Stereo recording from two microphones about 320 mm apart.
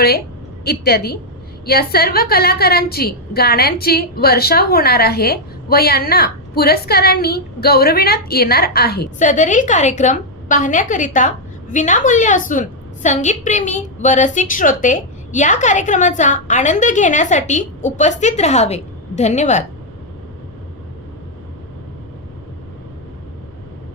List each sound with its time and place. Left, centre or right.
0.6 s a woman's voice: left